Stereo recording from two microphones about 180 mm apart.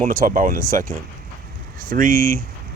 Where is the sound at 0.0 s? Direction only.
50° right (ahead or behind).